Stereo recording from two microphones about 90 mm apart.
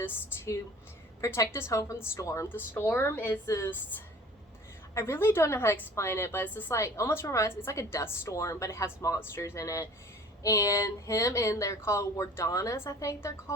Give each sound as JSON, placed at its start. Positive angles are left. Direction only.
{"t": 0.0, "sound": "a woman's voice", "side_deg": 30}
{"t": 3.4, "sound": "a woman's voice", "side_deg": 35}
{"t": 4.9, "sound": "a woman's voice", "side_deg": 30}
{"t": 6.7, "sound": "a woman's voice", "side_deg": 35}